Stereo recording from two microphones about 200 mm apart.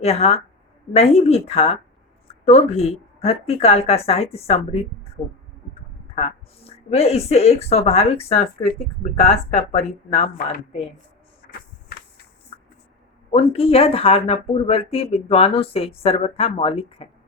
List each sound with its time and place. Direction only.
0.0 s a woman's voice: 30° left (ahead or behind)
11.4 s a sound: 50° left (ahead or behind)
13.3 s speech: 30° left (ahead or behind)